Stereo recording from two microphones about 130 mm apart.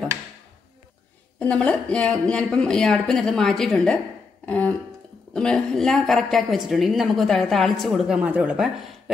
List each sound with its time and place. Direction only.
1.4 s a woman's voice: 10° left (ahead or behind); by 9.1 s 5° right (ahead or behind)